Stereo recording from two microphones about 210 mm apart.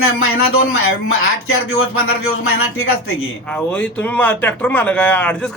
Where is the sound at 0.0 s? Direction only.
85° left.